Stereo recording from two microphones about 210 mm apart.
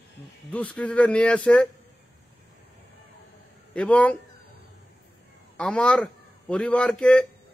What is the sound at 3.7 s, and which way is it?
Speech, 5° left (ahead or behind).